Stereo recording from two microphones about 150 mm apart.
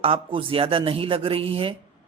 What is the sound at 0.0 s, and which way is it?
A man's voice, 35° right (ahead or behind).